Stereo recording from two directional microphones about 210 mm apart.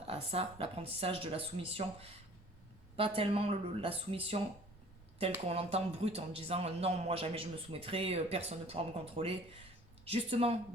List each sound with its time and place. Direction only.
0.1 s a man's voice: 30° right (ahead or behind)
5.5 s a man's voice: 30° right (ahead or behind)